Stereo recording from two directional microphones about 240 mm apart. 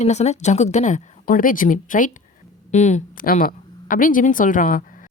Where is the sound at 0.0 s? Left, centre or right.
Left.